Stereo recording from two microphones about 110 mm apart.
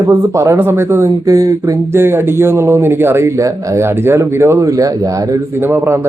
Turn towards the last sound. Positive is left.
turn(degrees=-20)  # may be behind; listen again after turning